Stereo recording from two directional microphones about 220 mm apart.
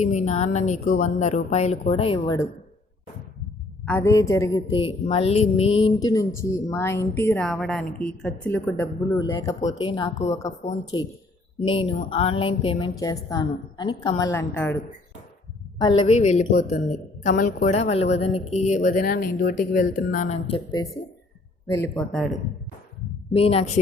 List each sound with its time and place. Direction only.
0.0 s speech: 30° left (ahead or behind); by 2.5 s 15° left (ahead or behind)
3.8 s a woman's voice: 10° left (ahead or behind); by 5.8 s 30° left (ahead or behind)
6.0 s a woman's voice: 15° left (ahead or behind)
15.8 s a woman's voice: 20° left (ahead or behind)
16.1 s speech: 30° left (ahead or behind)
20.8 s a woman's voice: 20° left (ahead or behind)
21.7 s speech: 5° left (ahead or behind)
23.3 s a woman's voice: 25° left (ahead or behind)